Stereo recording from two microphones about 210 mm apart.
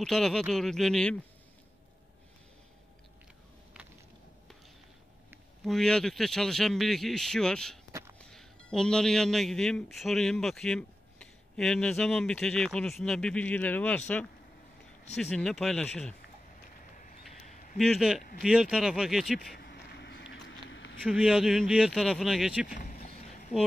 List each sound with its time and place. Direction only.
0.0 s a man's voice: centre (ahead or behind)
5.3 s a man's voice: centre (ahead or behind)
16.9 s a sound: 40° left (ahead or behind)
17.7 s a man's voice: centre (ahead or behind)
19.5 s a sound: 50° left (ahead or behind)
21.0 s a man's voice: centre (ahead or behind)